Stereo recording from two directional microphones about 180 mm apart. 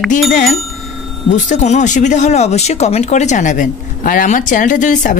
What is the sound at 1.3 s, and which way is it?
Speech, 40° left (ahead or behind).